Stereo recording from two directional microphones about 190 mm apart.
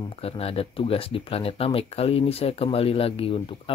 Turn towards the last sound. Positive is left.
turn(degrees=30)  # may be behind; listen again after turning